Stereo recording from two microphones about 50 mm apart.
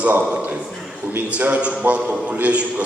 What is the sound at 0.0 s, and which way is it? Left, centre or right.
A man's voice, right.